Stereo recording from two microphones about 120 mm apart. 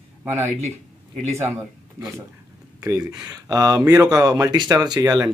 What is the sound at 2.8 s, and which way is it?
Speech, 30° right (ahead or behind).